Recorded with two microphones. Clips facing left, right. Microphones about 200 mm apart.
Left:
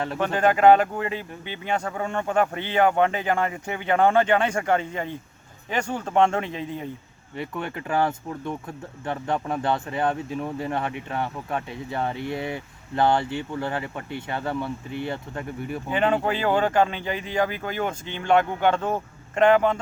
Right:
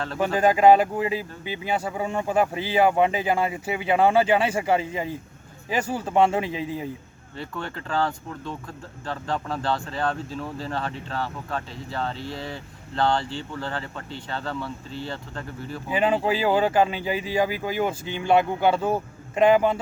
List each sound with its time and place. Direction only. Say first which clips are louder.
0.2 s speech: right 1 dB; 10° right (ahead or behind)
7.3 s speech: left 3 dB; 20° left (ahead or behind)
15.9 s speech: right 1 dB; 5° right (ahead or behind)